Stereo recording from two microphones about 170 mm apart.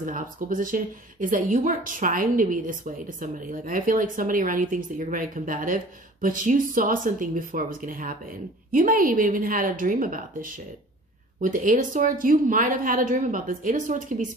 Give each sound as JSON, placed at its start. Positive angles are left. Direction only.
{"t": 0.0, "sound": "speech", "side_deg": -50}